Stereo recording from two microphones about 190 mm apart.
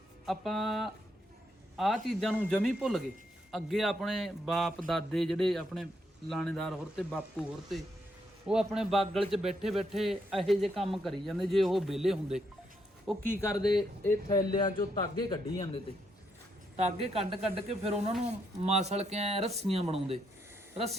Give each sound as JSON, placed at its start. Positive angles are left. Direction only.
{"t": 0.3, "sound": "a man's voice", "side_deg": 0}
{"t": 14.0, "sound": "a man's voice", "side_deg": 15}
{"t": 16.7, "sound": "speech", "side_deg": -30}